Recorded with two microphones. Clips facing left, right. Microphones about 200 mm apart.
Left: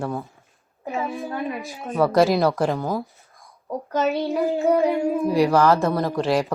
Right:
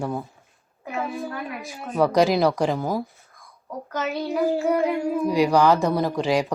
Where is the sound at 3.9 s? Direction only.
30° left (ahead or behind).